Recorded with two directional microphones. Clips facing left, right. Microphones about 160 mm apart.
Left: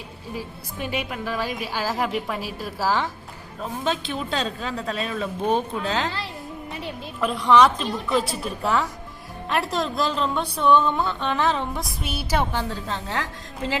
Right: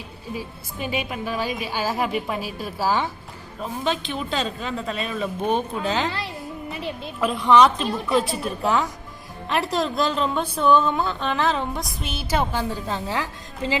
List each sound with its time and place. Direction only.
0.9 s speech: centre (ahead or behind)